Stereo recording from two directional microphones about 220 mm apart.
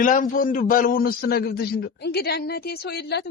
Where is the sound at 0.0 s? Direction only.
35° left (ahead or behind).